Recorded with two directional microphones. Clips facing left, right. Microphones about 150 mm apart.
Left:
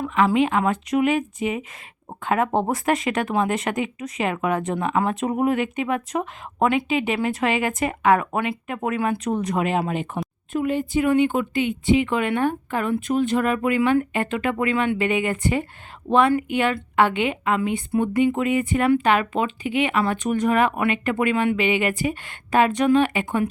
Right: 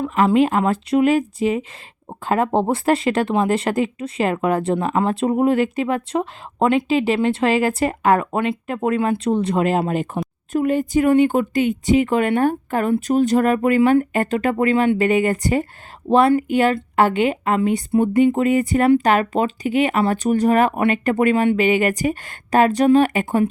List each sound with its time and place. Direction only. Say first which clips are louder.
0.3 s speech: right 3 dB; 40° right (ahead or behind)